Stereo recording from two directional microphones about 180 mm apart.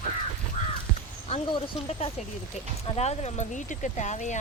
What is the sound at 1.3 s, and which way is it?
Speech, 30° left (ahead or behind).